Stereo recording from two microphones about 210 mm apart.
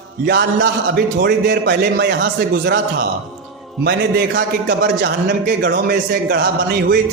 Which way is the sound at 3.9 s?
50° right (ahead or behind).